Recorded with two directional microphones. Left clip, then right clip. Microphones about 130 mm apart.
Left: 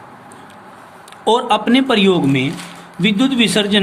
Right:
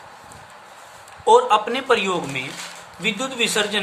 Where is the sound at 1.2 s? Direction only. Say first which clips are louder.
Even; 20° left (ahead or behind).